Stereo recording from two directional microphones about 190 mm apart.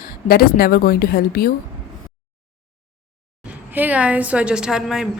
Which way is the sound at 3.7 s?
10° right (ahead or behind).